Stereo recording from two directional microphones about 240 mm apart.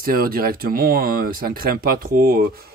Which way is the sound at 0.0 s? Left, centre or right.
Right.